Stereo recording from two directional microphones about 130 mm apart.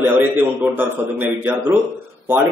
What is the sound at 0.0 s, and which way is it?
A man's voice, 15° right (ahead or behind).